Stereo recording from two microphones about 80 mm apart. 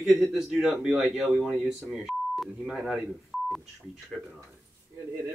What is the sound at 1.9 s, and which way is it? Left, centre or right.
Beep, centre.